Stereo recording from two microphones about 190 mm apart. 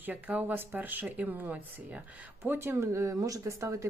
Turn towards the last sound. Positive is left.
turn(degrees=-15)  # may be behind; listen again after turning